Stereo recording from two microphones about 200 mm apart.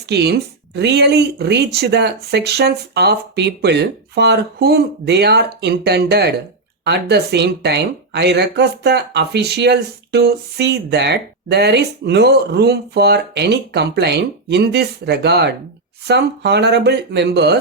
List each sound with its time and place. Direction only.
0.1 s speech: 55° right (ahead or behind)